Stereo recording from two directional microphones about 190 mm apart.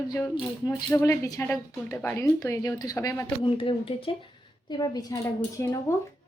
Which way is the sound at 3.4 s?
30° left (ahead or behind).